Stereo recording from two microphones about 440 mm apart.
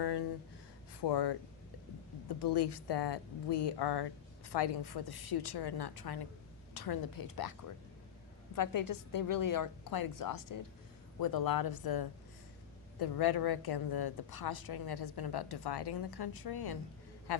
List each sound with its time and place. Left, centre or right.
0.0 s gasp: left
1.1 s speech: left
2.4 s speech: left
8.5 s a woman's voice: left